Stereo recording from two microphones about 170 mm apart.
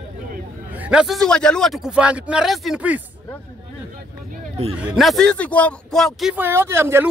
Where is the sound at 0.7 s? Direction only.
5° right (ahead or behind).